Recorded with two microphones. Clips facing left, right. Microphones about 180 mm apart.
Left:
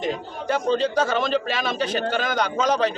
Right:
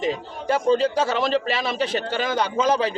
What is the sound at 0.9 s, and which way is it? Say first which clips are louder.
A man's voice: even; 30° right (ahead or behind).